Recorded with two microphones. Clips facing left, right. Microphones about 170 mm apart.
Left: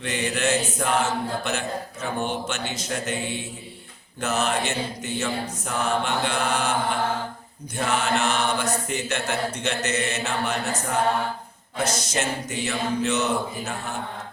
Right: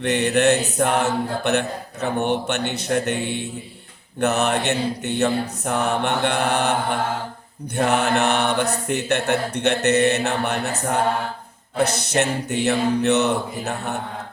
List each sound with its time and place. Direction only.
0.0 s speech: 65° right (ahead or behind)
7.8 s speech: 60° right (ahead or behind)
11.8 s speech: 65° right (ahead or behind)